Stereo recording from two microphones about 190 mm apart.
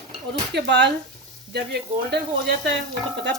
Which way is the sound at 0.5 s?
65° right (ahead or behind).